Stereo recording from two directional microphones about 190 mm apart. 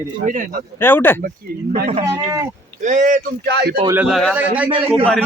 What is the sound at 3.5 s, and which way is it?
Speech, 60° right (ahead or behind).